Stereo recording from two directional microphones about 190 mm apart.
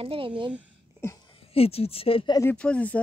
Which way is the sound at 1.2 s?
30° left (ahead or behind).